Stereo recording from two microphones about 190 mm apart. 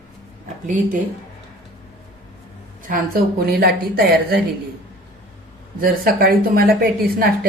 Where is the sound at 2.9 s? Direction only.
50° right (ahead or behind).